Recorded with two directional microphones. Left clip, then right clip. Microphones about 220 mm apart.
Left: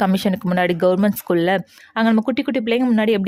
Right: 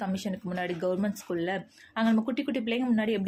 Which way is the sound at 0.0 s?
45° left (ahead or behind).